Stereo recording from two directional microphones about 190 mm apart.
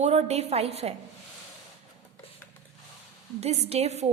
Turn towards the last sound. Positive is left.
turn(degrees=-35)  # may be behind; listen again after turning